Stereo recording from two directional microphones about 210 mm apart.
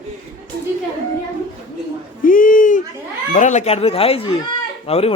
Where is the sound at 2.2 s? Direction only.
40° left (ahead or behind).